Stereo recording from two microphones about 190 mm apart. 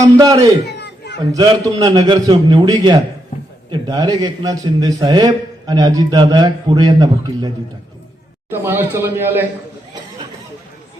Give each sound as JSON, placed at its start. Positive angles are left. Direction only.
{"t": 0.0, "sound": "speech", "side_deg": -20}
{"t": 0.6, "sound": "chatter", "side_deg": 60}
{"t": 1.3, "sound": "a man's voice", "side_deg": -20}
{"t": 8.4, "sound": "speech", "side_deg": -10}